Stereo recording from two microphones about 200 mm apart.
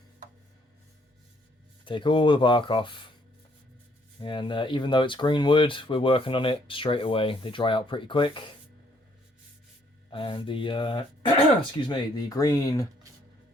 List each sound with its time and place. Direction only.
1.8 s speech: 25° left (ahead or behind)
4.2 s speech: 25° left (ahead or behind)
10.1 s speech: 25° left (ahead or behind)